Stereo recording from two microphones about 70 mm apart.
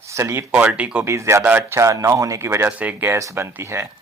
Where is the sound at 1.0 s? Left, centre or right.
Right.